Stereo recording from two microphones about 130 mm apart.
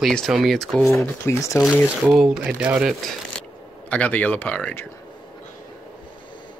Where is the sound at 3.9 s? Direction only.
10° left (ahead or behind).